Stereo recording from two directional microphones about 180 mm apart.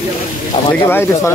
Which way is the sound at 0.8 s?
10° left (ahead or behind).